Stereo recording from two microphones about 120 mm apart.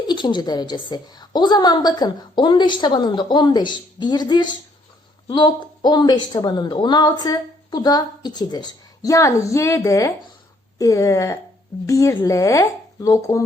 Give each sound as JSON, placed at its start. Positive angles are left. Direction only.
{"t": 0.1, "sound": "speech", "side_deg": 40}